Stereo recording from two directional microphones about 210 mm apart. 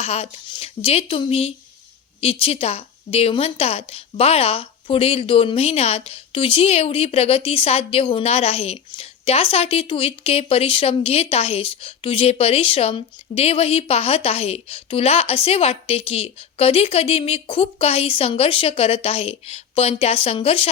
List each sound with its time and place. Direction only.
0.0 s a woman's voice: 30° left (ahead or behind)